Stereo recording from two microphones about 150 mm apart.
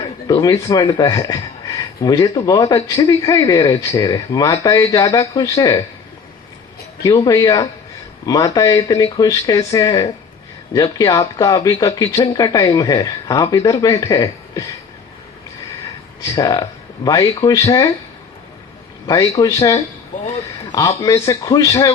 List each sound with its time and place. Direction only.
0.4 s speech: 20° left (ahead or behind)
7.0 s speech: 25° left (ahead or behind)
16.2 s speech: 20° left (ahead or behind)
19.0 s a man's voice: 20° left (ahead or behind)